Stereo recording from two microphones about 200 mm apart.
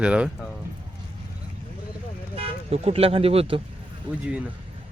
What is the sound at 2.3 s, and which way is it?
Speech, 30° right (ahead or behind).